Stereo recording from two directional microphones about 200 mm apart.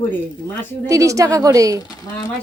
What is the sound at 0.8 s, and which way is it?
Speech, 15° right (ahead or behind).